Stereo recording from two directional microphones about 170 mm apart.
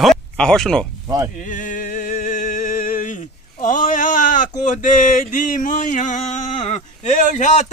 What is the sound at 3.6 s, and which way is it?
Sheep, 50° left (ahead or behind).